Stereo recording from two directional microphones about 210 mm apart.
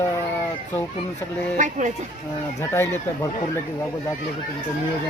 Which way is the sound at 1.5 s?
35° right (ahead or behind).